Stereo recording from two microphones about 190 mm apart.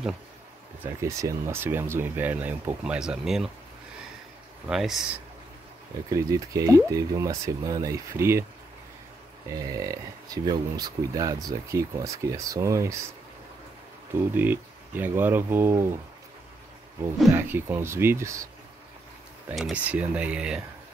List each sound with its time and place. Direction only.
0.8 s speech: 15° right (ahead or behind)
4.6 s speech: centre (ahead or behind)
6.1 s speech: 15° right (ahead or behind)
9.5 s speech: 15° right (ahead or behind)
14.3 s speech: 10° right (ahead or behind)
17.3 s speech: 10° right (ahead or behind)
19.5 s speech: 5° right (ahead or behind)